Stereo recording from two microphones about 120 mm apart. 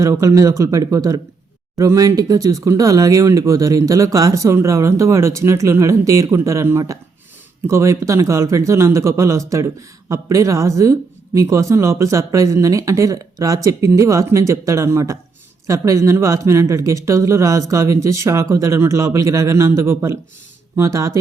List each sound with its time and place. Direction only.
0.0 s speech: 25° right (ahead or behind)